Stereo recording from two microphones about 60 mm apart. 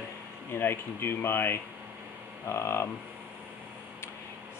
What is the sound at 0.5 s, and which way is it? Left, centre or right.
Speech, left.